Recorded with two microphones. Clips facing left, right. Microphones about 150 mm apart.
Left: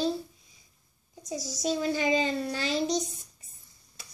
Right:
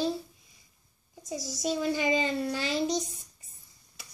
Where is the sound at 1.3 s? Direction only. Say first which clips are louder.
Left 1 dB; centre (ahead or behind).